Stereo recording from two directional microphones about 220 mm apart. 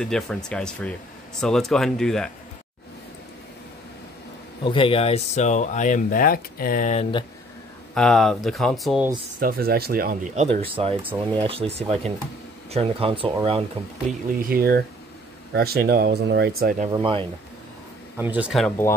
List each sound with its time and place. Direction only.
0.0 s speech: 5° left (ahead or behind)
4.6 s speech: 25° left (ahead or behind)
7.9 s speech: centre (ahead or behind)
9.4 s speech: 40° right (ahead or behind); by 13.7 s 25° right (ahead or behind)
14.5 s speech: 45° right (ahead or behind)
16.9 s speech: 25° right (ahead or behind)
18.1 s speech: 10° right (ahead or behind)